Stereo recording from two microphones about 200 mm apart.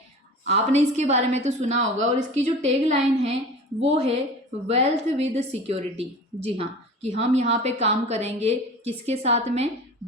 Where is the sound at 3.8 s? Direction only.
35° right (ahead or behind).